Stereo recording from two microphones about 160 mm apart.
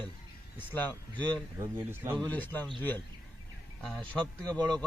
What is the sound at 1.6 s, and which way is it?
Speech, 15° right (ahead or behind).